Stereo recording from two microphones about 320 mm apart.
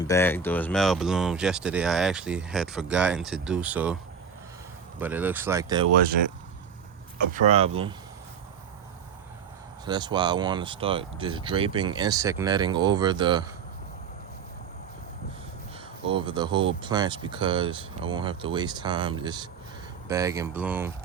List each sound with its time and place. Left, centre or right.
0.0 s speech: centre
4.9 s speech: centre
7.3 s speech: centre
9.8 s speech: centre
16.0 s speech: centre